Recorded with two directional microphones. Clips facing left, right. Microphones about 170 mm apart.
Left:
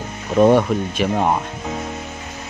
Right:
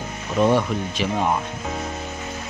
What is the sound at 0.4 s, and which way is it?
Speech, 50° left (ahead or behind).